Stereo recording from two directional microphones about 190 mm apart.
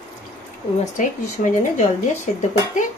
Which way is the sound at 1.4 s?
40° left (ahead or behind).